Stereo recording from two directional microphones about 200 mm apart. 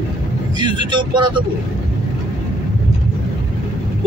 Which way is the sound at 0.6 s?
25° right (ahead or behind).